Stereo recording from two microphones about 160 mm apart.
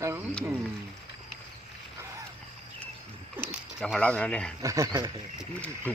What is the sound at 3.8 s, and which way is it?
Speech, 5° left (ahead or behind).